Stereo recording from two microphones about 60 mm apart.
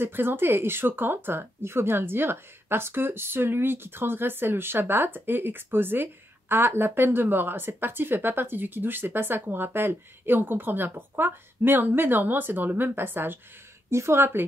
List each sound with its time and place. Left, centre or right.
0.0 s a woman's voice: right
13.8 s speech: right